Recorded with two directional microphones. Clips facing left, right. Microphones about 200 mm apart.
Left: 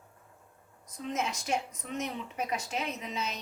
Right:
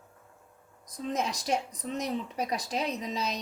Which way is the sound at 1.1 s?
35° right (ahead or behind).